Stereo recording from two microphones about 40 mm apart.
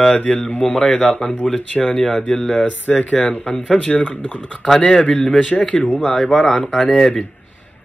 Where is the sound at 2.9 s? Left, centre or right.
Left.